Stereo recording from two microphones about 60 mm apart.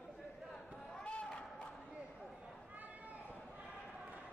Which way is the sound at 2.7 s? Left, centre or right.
Right.